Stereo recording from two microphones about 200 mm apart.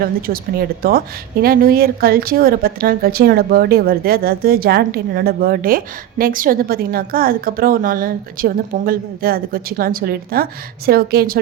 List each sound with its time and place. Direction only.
0.8 s a woman's voice: 50° right (ahead or behind)